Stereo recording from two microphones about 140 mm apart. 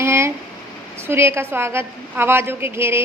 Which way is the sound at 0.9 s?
20° right (ahead or behind).